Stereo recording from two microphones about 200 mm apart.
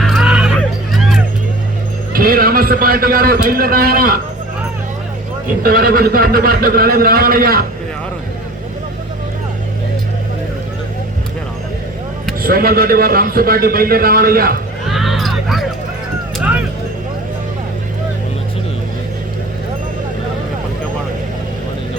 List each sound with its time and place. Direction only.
0.0 s a sound: centre (ahead or behind)
0.6 s music: centre (ahead or behind)
2.1 s a man's voice: 50° right (ahead or behind)
5.6 s a man's voice: 45° right (ahead or behind)
12.4 s a man's voice: 50° right (ahead or behind)
14.8 s a sound: centre (ahead or behind)